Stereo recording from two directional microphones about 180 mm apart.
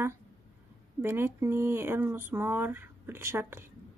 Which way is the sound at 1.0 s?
15° right (ahead or behind).